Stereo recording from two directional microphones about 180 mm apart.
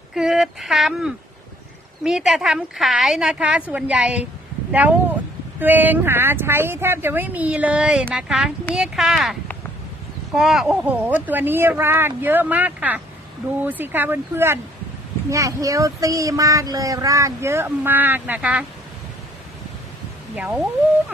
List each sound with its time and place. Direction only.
0.1 s a woman's voice: centre (ahead or behind)
20.3 s a woman's voice: 5° right (ahead or behind)